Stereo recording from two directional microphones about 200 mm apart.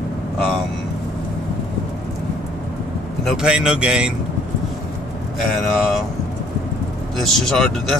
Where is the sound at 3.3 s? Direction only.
5° right (ahead or behind).